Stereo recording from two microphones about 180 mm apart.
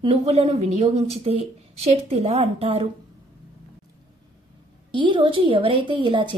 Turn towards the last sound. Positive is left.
turn(degrees=-30)  # may be behind; listen again after turning